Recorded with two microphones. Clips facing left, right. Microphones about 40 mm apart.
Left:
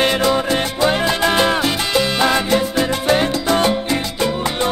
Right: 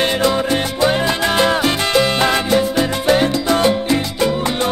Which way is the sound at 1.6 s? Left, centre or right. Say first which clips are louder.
Right 2 dB; right.